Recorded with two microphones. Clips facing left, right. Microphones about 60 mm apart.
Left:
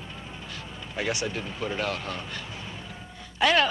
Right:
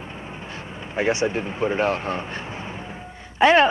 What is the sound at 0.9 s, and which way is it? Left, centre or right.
Speech, right.